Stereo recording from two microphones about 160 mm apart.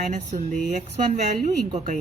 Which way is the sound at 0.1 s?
50° right (ahead or behind).